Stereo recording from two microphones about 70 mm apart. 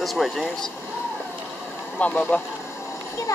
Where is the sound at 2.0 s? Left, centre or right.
Centre.